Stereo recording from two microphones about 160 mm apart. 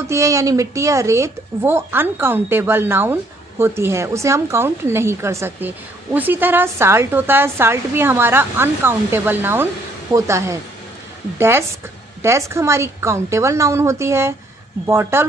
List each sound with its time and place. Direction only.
0.0 s speech: 20° right (ahead or behind)